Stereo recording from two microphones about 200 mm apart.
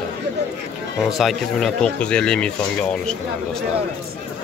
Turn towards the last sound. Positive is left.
turn(degrees=5)  # may be behind; listen again after turning